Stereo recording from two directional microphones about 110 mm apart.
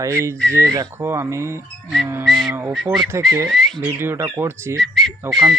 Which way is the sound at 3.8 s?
20° right (ahead or behind).